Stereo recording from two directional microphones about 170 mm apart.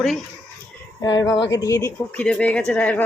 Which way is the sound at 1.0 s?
25° left (ahead or behind).